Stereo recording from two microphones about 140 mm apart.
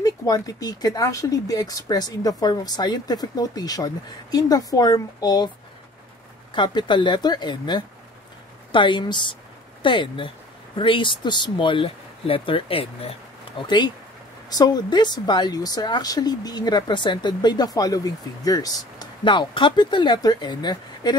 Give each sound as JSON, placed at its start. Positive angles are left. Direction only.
{"t": 0.0, "sound": "a woman's voice", "side_deg": 25}
{"t": 6.5, "sound": "a woman's voice", "side_deg": 35}